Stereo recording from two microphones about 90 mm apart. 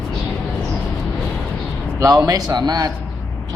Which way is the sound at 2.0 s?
40° right (ahead or behind).